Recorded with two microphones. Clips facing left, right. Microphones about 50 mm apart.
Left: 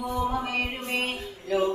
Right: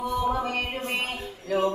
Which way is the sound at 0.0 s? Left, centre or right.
Right.